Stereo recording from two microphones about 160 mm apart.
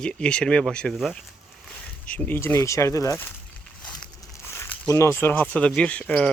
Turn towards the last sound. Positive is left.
turn(degrees=10)  # may be behind; listen again after turning